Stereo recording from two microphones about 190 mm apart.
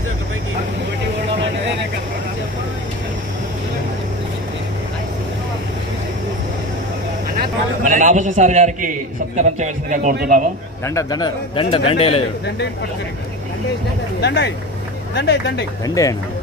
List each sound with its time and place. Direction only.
7.3 s a man's voice: 45° right (ahead or behind)
11.0 s a man's voice: 20° left (ahead or behind)
14.2 s speech: 60° left (ahead or behind)
15.8 s speech: 15° left (ahead or behind)